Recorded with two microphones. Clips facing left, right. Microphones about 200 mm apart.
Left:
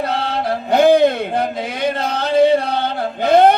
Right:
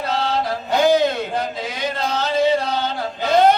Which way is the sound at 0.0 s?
55° left (ahead or behind).